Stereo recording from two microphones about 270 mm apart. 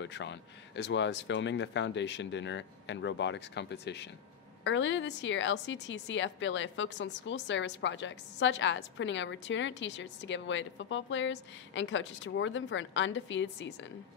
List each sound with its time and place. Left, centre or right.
0.0 s a woman's voice: left